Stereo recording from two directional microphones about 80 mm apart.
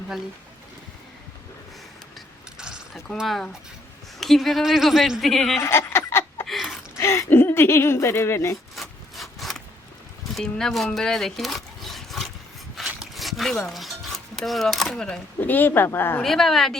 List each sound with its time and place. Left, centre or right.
3.2 s a woman's voice: centre
5.5 s a sound: left
6.4 s a sound: centre
6.9 s a sound: left
7.3 s speech: left
8.7 s sawing: centre
10.3 s speech: centre
12.7 s music: centre
15.4 s speech: left
16.2 s a woman's voice: centre